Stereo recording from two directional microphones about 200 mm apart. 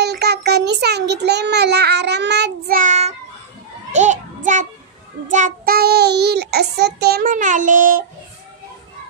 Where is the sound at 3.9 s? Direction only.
35° right (ahead or behind).